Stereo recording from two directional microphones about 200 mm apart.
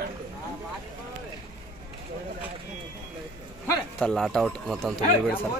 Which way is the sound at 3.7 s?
5° left (ahead or behind).